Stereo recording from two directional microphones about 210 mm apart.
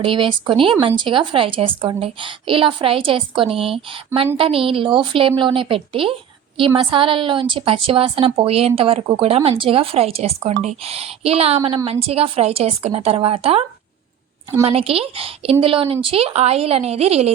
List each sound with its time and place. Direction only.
0.0 s a woman's voice: 25° right (ahead or behind)